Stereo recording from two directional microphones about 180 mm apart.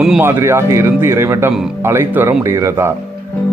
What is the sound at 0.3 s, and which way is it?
Speech, 15° right (ahead or behind).